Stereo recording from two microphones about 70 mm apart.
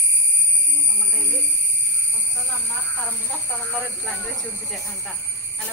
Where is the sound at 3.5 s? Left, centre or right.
Left.